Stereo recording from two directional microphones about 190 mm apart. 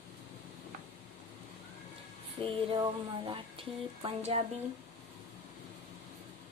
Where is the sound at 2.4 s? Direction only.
25° right (ahead or behind).